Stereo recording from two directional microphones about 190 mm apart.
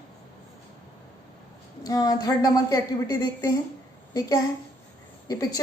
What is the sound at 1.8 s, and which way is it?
A woman's voice, 20° left (ahead or behind).